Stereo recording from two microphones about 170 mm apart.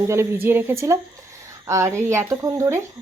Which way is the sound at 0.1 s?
15° right (ahead or behind).